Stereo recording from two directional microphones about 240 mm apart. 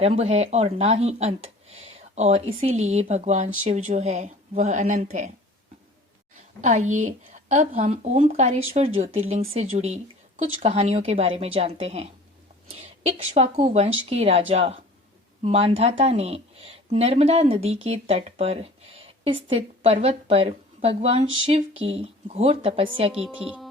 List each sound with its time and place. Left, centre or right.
0.0 s speech: right
6.6 s speech: right
23.2 s speech: centre